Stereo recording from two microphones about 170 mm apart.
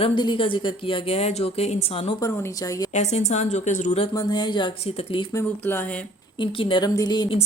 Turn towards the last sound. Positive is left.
turn(degrees=30)  # may be behind; listen again after turning